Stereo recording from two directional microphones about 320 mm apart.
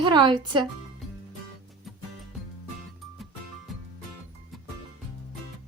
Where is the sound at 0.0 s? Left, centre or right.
Centre.